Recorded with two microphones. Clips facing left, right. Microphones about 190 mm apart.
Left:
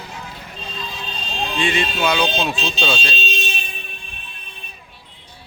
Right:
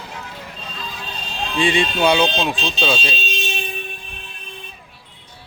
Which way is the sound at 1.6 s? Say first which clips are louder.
Right 4 dB; 30° right (ahead or behind).